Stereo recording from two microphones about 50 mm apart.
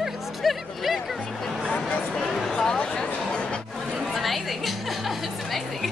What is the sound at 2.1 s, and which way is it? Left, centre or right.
Speech, centre.